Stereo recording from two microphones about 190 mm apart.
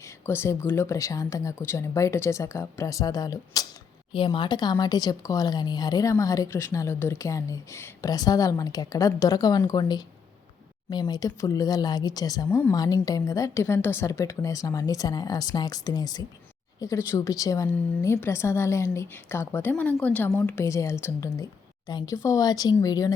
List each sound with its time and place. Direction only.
0.0 s speech: 15° left (ahead or behind)